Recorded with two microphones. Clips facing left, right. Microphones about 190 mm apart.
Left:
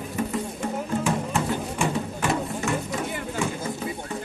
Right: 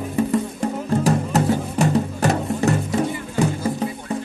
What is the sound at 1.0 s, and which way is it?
Music, 40° right (ahead or behind).